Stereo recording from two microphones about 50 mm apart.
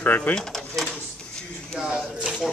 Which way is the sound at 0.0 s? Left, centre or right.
Left.